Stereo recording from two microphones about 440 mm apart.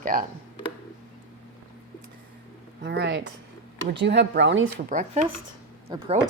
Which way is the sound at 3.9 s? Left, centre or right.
Right.